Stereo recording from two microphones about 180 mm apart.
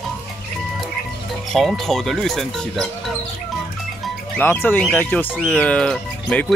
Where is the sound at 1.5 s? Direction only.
Centre (ahead or behind).